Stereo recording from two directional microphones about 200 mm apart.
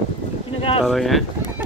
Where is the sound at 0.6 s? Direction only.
25° left (ahead or behind).